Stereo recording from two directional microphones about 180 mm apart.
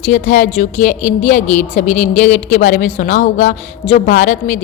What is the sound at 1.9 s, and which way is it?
Speech, 10° left (ahead or behind).